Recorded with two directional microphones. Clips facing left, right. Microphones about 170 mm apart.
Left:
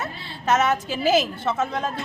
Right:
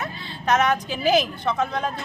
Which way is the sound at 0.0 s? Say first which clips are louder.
Even; 5° left (ahead or behind).